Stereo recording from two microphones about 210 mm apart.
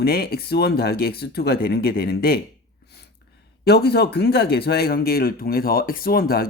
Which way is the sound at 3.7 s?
50° left (ahead or behind).